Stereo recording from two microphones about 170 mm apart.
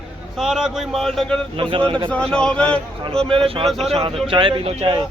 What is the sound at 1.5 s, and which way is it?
Speech, 30° right (ahead or behind).